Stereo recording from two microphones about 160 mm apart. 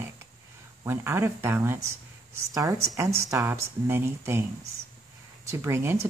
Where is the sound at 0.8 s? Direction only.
15° right (ahead or behind).